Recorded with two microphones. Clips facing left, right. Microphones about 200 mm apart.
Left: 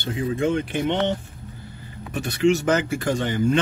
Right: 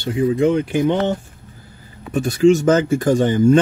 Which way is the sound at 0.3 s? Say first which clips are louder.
Right 6 dB; 35° right (ahead or behind).